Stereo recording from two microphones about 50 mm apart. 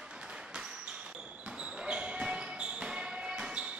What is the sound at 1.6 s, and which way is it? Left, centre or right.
Basketball bounce, right.